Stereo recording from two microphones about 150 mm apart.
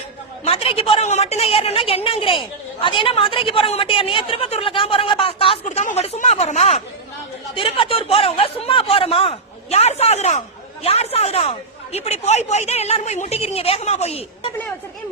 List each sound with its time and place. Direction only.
0.4 s a woman's voice: 40° left (ahead or behind)
5.6 s speech: 55° left (ahead or behind)
6.0 s a sound: 45° left (ahead or behind)
7.5 s a woman's voice: 35° left (ahead or behind)